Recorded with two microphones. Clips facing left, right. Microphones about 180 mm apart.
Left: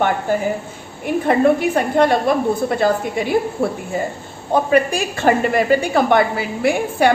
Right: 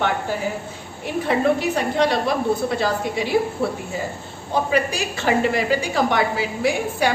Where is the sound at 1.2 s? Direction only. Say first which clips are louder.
Left 4 dB; 50° left (ahead or behind).